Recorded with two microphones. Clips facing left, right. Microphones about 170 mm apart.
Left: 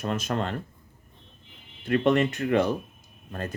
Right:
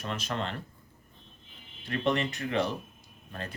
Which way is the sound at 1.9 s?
50° left (ahead or behind).